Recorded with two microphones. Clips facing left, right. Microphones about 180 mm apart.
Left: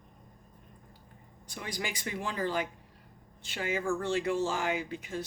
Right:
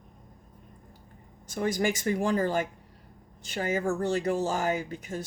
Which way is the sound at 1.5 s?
45° right (ahead or behind).